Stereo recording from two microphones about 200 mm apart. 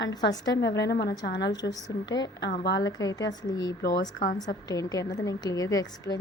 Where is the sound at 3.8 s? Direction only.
50° left (ahead or behind).